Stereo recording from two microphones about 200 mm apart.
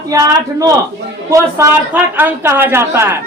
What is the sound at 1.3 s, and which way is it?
A woman's voice, 15° right (ahead or behind).